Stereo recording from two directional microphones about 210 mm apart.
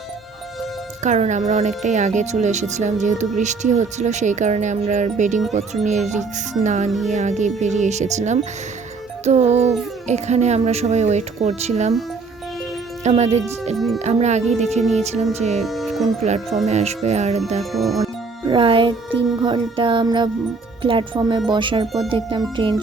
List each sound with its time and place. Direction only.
1.0 s speech: 35° right (ahead or behind)
13.1 s speech: 30° right (ahead or behind)
13.7 s speech: centre (ahead or behind)
14.0 s speech: 30° right (ahead or behind)
15.6 s music: centre (ahead or behind)
16.6 s speech: 30° right (ahead or behind)
17.6 s speech: centre (ahead or behind)
18.0 s speech: 25° right (ahead or behind)